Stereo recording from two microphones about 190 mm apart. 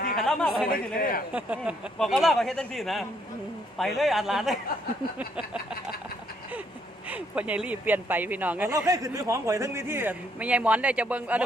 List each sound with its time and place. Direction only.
0.2 s speech: centre (ahead or behind)
0.9 s a man's voice: 50° left (ahead or behind)
1.3 s speech: 5° right (ahead or behind)
7.1 s speech: 5° right (ahead or behind)